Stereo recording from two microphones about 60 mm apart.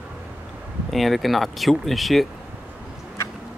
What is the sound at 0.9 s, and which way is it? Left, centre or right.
Speech, centre.